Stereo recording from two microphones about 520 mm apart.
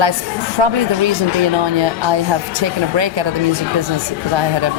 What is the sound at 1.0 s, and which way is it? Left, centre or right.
Speech, right.